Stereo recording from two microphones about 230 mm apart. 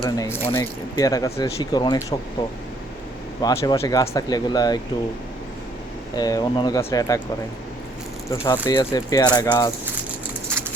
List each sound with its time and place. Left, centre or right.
0.0 s speech: centre
3.4 s speech: centre
6.1 s speech: centre
8.3 s speech: centre